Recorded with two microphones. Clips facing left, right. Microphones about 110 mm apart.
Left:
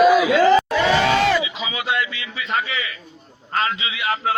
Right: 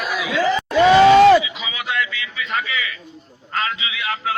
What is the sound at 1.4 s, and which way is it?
A man's voice, 35° left (ahead or behind).